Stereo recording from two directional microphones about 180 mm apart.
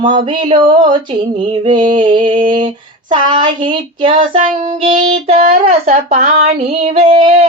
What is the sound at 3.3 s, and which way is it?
Child singing, 25° right (ahead or behind).